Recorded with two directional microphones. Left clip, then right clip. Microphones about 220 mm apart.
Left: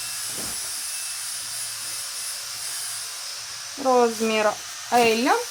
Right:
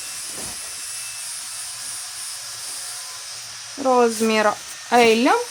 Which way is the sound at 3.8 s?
30° right (ahead or behind).